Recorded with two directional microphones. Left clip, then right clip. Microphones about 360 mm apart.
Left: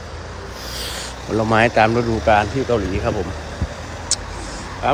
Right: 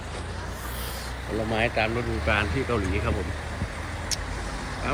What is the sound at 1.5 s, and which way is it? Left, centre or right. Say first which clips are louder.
Speech: left 11 dB; left.